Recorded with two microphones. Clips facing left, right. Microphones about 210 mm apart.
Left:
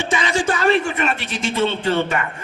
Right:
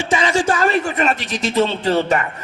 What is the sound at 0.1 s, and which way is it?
A woman's voice, 40° right (ahead or behind).